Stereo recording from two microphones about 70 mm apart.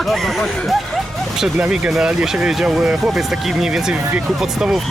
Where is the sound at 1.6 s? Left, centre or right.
Centre.